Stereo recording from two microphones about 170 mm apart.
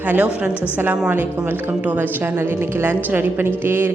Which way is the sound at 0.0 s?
10° right (ahead or behind).